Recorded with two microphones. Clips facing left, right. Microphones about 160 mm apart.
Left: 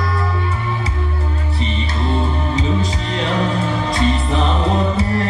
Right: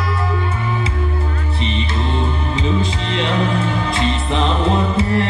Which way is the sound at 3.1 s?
40° left (ahead or behind).